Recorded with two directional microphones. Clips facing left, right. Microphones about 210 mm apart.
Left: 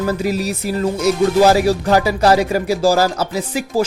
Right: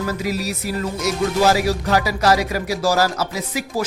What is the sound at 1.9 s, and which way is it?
Speech, 30° left (ahead or behind).